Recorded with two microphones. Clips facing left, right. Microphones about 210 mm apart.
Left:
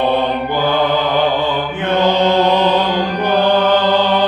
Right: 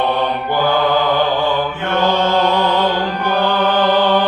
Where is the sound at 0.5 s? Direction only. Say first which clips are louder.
Right 1 dB; 20° left (ahead or behind).